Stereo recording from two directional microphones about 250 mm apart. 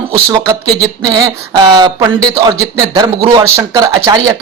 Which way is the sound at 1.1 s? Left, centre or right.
Centre.